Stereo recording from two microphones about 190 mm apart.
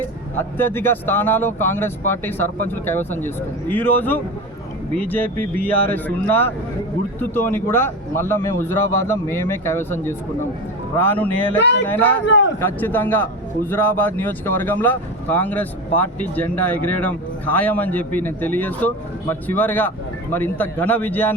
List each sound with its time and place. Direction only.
0.3 s speech: 10° left (ahead or behind)
12.2 s a man's voice: 70° left (ahead or behind)
12.5 s speech: 10° left (ahead or behind)